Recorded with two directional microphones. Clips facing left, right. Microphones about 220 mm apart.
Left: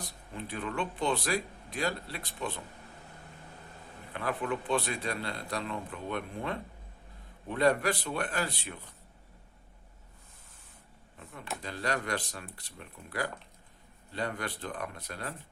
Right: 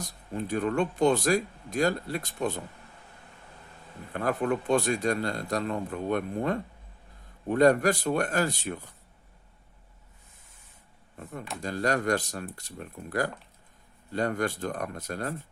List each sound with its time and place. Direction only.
0.0 s speech: 45° right (ahead or behind)
4.1 s speech: 45° right (ahead or behind)
11.2 s speech: 45° right (ahead or behind)